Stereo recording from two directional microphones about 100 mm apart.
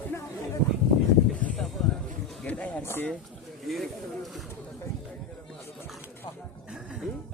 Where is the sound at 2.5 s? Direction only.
10° left (ahead or behind).